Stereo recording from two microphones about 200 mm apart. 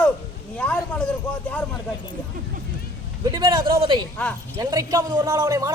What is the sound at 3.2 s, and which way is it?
Speech, 20° right (ahead or behind).